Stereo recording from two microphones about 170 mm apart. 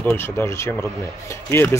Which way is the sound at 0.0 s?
15° left (ahead or behind).